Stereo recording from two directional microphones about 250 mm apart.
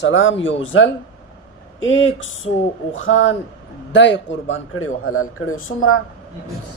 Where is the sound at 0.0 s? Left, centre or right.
Left.